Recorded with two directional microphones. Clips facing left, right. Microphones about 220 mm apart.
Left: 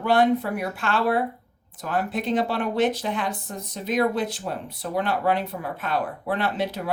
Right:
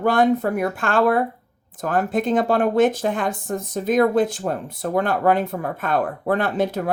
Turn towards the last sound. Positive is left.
turn(degrees=-45)  # may be behind; listen again after turning